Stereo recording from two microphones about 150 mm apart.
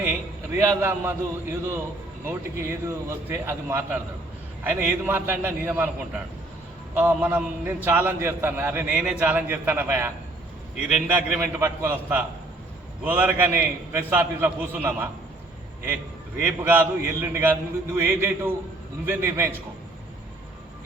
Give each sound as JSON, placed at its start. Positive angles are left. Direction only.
{"t": 0.6, "sound": "a man's voice", "side_deg": -15}
{"t": 11.3, "sound": "a man's voice", "side_deg": -15}
{"t": 16.4, "sound": "a man's voice", "side_deg": -15}